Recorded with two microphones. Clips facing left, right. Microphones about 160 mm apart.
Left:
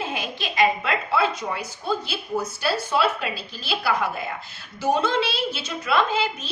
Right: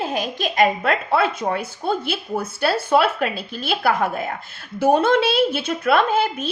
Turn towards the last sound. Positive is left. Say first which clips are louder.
# right 4 dB
turn(degrees=-55)  # may be behind; listen again after turning